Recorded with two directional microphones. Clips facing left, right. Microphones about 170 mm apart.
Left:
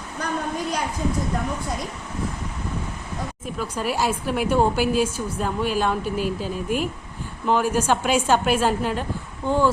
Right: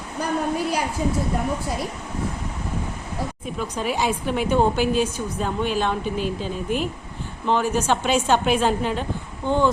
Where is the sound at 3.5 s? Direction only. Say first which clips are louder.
Even; 5° left (ahead or behind).